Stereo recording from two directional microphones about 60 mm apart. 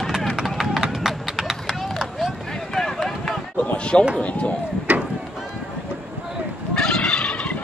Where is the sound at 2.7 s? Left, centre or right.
Centre.